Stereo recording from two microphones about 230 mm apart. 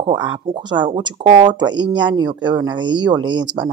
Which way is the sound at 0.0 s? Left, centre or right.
Right.